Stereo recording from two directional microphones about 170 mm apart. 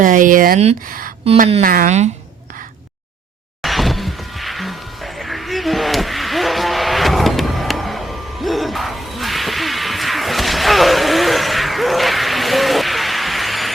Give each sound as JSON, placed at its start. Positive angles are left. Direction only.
{"t": 0.0, "sound": "speech", "side_deg": -50}
{"t": 3.6, "sound": "music", "side_deg": 0}